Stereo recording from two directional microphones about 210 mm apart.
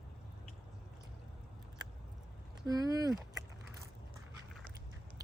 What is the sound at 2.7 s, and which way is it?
Speech, 15° right (ahead or behind).